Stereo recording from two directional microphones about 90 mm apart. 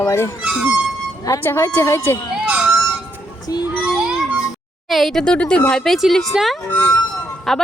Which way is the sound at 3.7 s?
10° right (ahead or behind).